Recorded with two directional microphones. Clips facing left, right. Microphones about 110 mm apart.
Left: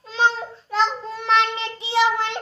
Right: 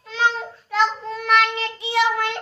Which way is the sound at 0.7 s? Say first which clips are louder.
Right 1 dB; 25° left (ahead or behind).